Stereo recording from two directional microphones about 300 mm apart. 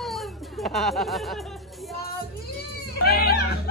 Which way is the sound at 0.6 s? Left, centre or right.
Centre.